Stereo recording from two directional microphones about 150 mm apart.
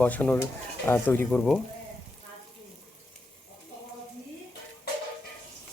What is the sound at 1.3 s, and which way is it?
Speech, 5° left (ahead or behind).